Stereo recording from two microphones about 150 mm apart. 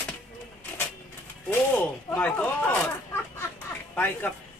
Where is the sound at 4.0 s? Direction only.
15° left (ahead or behind).